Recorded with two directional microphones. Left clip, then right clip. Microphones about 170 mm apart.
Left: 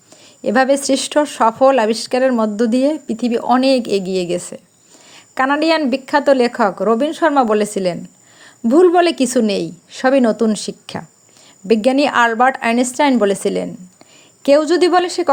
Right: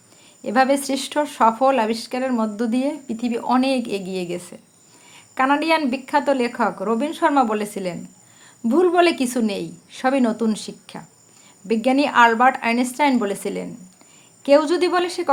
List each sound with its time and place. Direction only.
0.4 s speech: 35° left (ahead or behind)